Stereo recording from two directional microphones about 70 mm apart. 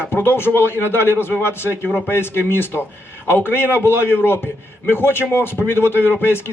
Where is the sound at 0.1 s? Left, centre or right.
Left.